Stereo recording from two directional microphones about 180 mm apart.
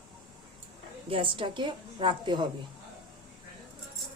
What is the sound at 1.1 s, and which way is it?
A woman's voice, 30° right (ahead or behind).